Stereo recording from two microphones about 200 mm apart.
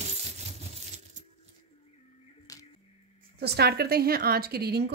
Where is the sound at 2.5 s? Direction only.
15° left (ahead or behind).